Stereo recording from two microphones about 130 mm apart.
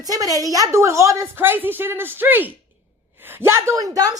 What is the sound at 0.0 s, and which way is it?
A woman's voice, 30° right (ahead or behind).